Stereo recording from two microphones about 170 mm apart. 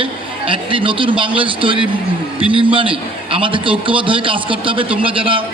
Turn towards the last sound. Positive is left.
turn(degrees=-30)  # may be behind; listen again after turning